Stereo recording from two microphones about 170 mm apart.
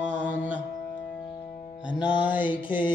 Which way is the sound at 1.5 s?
50° left (ahead or behind).